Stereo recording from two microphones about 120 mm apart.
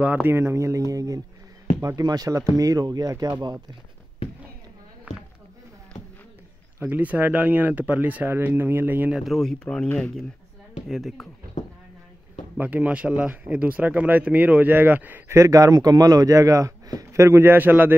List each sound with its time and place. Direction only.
0.0 s speech: 15° right (ahead or behind); by 3.6 s 35° right (ahead or behind)
5.1 s a sound: 10° right (ahead or behind)
6.8 s speech: 15° right (ahead or behind)
9.1 s speech: centre (ahead or behind)
12.5 s speech: 15° right (ahead or behind)